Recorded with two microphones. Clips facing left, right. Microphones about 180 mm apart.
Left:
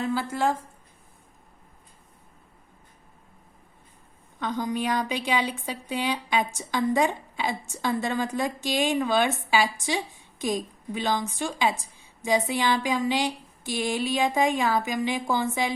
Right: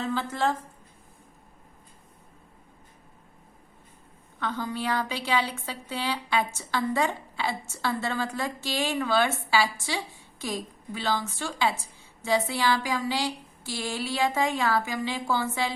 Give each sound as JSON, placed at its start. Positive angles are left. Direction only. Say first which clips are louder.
{"t": 0.0, "sound": "a woman's voice", "louder": "left 2 dB", "side_deg": 10}
{"t": 4.4, "sound": "a woman's voice", "louder": "left 3 dB", "side_deg": 15}